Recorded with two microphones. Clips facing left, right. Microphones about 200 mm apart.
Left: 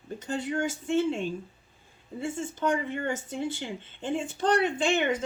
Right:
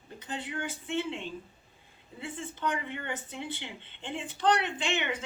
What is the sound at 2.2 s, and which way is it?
Speech, 45° left (ahead or behind).